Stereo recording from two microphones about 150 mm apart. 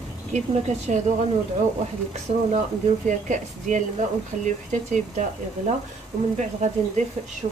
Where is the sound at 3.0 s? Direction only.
55° right (ahead or behind).